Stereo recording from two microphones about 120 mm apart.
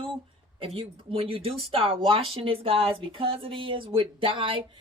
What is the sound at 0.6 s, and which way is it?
A woman's voice, 50° right (ahead or behind).